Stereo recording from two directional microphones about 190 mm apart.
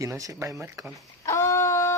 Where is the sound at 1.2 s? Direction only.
15° left (ahead or behind).